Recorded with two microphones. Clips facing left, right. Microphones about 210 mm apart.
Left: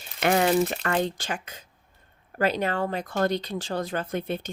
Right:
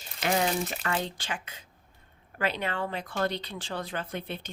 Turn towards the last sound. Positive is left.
turn(degrees=45)  # may be behind; listen again after turning